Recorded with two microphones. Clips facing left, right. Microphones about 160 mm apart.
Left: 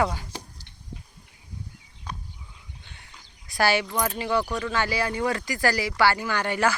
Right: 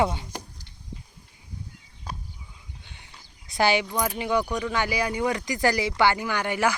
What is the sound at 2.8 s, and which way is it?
Speech, 15° right (ahead or behind).